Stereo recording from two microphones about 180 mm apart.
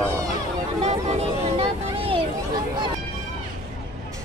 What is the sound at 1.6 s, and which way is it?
Vehicle, 30° right (ahead or behind).